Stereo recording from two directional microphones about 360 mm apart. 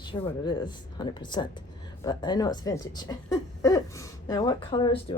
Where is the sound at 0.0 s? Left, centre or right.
Centre.